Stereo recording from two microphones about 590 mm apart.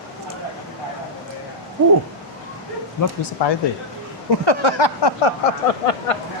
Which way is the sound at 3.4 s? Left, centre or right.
Left.